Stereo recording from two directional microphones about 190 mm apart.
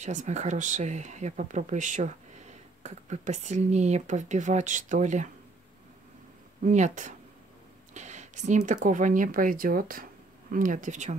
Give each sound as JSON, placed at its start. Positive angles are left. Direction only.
{"t": 0.0, "sound": "speech", "side_deg": -40}
{"t": 6.6, "sound": "speech", "side_deg": -40}